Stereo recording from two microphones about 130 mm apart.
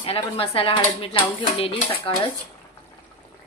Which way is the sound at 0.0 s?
45° left (ahead or behind).